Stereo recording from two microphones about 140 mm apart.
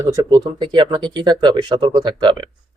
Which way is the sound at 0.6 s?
35° right (ahead or behind).